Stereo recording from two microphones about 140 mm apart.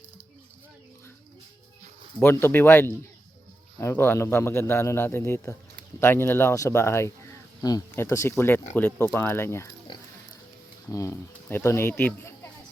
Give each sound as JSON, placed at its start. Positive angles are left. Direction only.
{"t": 2.2, "sound": "a man's voice", "side_deg": 15}
{"t": 10.8, "sound": "speech", "side_deg": 20}